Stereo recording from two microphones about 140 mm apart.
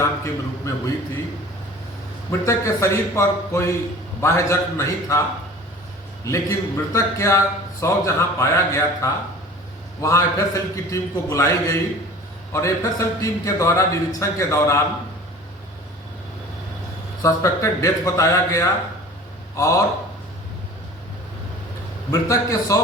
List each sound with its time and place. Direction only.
0.7 s a man's voice: 20° left (ahead or behind)
2.4 s a man's voice: 20° left (ahead or behind)
6.2 s a man's voice: 20° left (ahead or behind)
17.2 s a man's voice: 20° left (ahead or behind)
22.1 s a man's voice: 25° left (ahead or behind)